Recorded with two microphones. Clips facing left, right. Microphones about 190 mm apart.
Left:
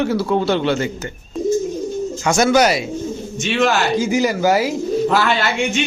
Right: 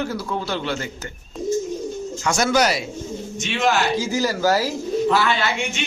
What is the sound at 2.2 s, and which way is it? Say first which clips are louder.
Speech: left 5 dB; 20° left (ahead or behind).